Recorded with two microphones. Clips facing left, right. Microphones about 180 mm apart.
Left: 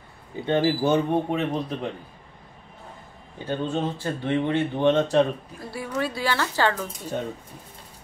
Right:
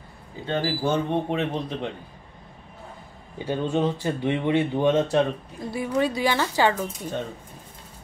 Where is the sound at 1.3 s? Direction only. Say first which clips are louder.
Left 1 dB; centre (ahead or behind).